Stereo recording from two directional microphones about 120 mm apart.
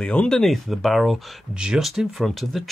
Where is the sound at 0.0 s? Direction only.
10° left (ahead or behind).